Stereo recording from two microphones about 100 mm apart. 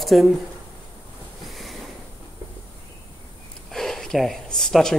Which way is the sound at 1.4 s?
Centre (ahead or behind).